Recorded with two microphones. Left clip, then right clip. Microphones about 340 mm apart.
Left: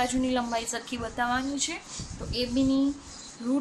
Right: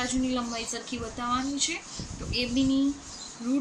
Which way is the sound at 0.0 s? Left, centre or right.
Left.